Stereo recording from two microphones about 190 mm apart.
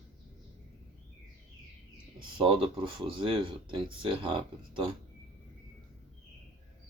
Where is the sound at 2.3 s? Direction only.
25° right (ahead or behind).